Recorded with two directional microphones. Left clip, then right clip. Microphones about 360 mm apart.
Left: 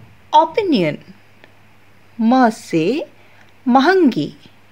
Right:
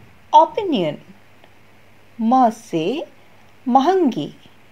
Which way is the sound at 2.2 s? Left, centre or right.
Centre.